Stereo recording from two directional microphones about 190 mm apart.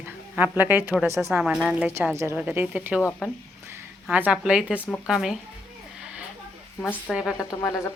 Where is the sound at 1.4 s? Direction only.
5° right (ahead or behind).